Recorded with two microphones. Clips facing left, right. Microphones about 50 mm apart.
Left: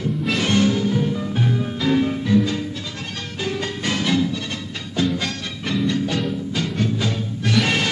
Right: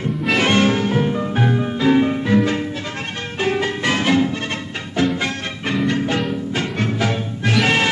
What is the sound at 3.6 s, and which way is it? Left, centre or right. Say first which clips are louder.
Music: right 5 dB; right.